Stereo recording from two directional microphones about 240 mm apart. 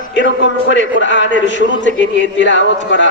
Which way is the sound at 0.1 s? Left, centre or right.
Left.